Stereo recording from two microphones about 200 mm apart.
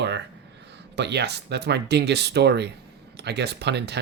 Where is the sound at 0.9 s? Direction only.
60° right (ahead or behind).